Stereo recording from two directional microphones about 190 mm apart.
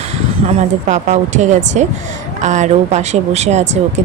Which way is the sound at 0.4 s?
40° right (ahead or behind).